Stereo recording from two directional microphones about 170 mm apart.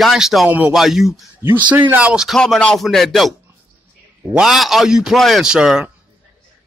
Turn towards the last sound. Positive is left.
turn(degrees=-5)  # may be behind; listen again after turning